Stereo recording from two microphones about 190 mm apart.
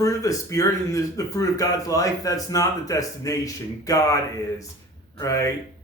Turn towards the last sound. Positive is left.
turn(degrees=15)  # may be behind; listen again after turning